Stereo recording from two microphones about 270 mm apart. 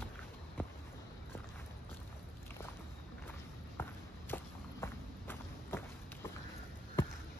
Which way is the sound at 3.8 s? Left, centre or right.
Centre.